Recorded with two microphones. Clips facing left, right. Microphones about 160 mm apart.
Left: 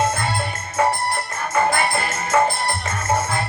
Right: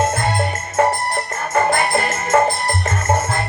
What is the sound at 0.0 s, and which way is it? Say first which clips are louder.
Music: right 2 dB; 50° right (ahead or behind).